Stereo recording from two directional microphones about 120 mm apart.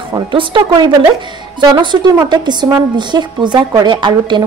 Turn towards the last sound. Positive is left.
turn(degrees=-40)  # may be behind; listen again after turning